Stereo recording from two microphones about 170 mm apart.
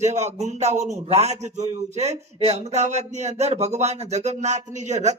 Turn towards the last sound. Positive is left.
turn(degrees=-40)  # may be behind; listen again after turning